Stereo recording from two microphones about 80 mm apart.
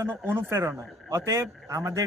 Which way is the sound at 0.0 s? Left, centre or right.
Right.